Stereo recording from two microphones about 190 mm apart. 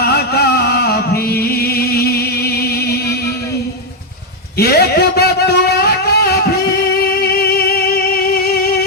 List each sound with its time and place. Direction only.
0.0 s music: 55° left (ahead or behind)
4.5 s a sound: 55° left (ahead or behind)
7.2 s music: 55° left (ahead or behind)